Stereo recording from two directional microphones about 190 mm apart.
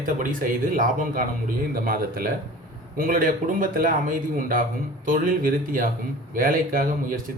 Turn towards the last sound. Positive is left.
turn(degrees=-50)  # may be behind; listen again after turning